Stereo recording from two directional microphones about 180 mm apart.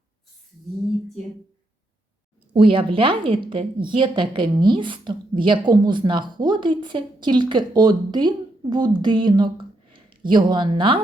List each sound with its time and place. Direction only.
2.5 s a woman's voice: 30° right (ahead or behind)